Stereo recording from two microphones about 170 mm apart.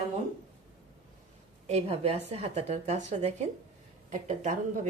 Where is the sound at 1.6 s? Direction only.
35° right (ahead or behind).